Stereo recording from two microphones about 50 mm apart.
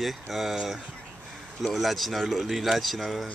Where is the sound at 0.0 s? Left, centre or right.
Centre.